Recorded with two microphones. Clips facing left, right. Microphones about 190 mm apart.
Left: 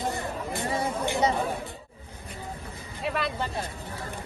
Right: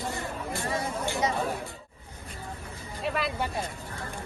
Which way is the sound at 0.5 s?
20° left (ahead or behind).